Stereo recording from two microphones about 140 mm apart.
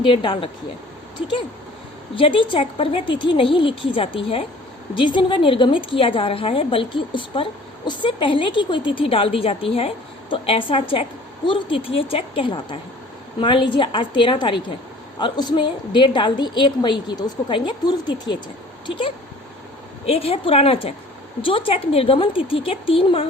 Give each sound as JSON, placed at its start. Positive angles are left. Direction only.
{"t": 0.0, "sound": "a woman's voice", "side_deg": 35}
{"t": 2.1, "sound": "a woman's voice", "side_deg": 40}